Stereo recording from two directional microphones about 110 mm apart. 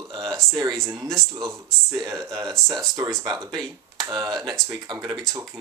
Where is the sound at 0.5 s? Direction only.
35° right (ahead or behind).